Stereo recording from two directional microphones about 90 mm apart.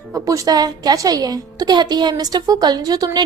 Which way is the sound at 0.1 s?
40° right (ahead or behind).